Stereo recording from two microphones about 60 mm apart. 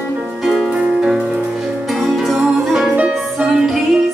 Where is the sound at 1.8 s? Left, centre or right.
Centre.